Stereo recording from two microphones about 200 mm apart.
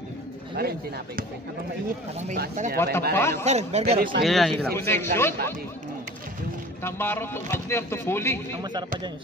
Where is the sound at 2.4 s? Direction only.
40° right (ahead or behind).